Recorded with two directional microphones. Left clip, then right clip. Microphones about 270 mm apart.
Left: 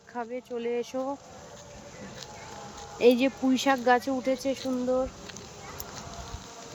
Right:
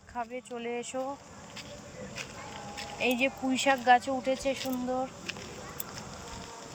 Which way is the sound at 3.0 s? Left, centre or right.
Centre.